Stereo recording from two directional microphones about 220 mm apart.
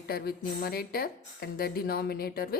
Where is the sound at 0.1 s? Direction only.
45° left (ahead or behind).